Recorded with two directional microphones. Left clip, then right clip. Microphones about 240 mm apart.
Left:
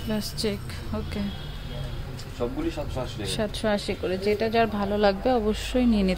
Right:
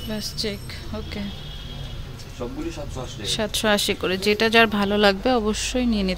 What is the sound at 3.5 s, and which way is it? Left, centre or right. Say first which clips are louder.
Speech: right 9 dB; centre.